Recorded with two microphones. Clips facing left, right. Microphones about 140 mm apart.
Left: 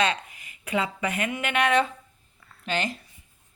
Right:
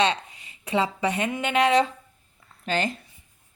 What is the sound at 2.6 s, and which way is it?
Speech, 40° right (ahead or behind).